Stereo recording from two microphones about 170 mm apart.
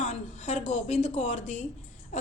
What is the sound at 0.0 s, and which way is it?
A woman's voice, 45° left (ahead or behind).